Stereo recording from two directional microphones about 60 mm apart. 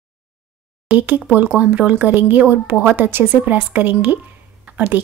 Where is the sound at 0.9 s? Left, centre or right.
Right.